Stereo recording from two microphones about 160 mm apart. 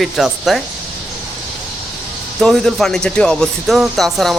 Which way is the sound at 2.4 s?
Centre (ahead or behind).